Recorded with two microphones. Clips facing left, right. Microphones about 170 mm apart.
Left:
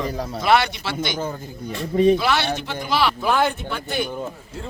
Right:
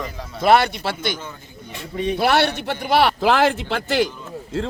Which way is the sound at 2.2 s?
60° right (ahead or behind).